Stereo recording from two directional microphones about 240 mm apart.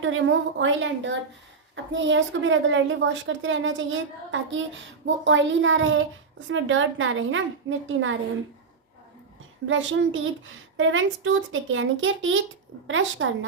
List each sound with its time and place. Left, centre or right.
0.0 s a woman's voice: right
9.6 s a woman's voice: right